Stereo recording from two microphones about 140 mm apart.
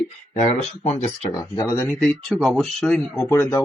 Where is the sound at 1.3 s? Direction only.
25° left (ahead or behind).